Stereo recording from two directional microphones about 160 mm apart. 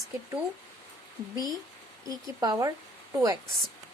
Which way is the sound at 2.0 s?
25° right (ahead or behind).